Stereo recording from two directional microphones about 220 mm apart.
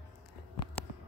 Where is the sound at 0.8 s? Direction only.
5° left (ahead or behind).